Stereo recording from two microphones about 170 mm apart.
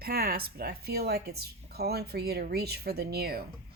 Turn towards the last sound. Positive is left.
turn(degrees=-65)  # may be behind; listen again after turning